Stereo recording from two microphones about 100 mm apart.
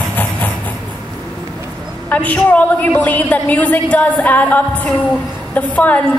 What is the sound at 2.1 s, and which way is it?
A woman's voice, 15° left (ahead or behind).